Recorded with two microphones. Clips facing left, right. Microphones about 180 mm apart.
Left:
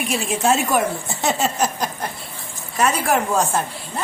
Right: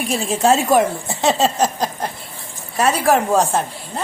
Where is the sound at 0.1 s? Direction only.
35° right (ahead or behind).